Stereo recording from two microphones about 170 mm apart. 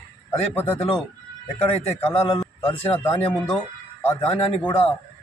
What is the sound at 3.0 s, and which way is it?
Speech, 5° left (ahead or behind).